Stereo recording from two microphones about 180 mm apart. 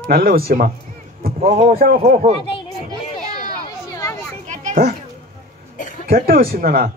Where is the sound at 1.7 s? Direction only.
55° right (ahead or behind).